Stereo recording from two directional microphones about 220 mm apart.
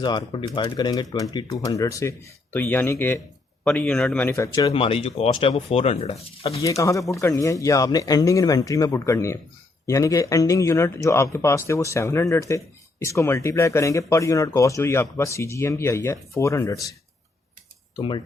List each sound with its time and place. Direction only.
0.0 s speech: 20° left (ahead or behind)
4.7 s speech: 25° left (ahead or behind)
6.6 s speech: 15° left (ahead or behind)
17.9 s speech: 20° left (ahead or behind)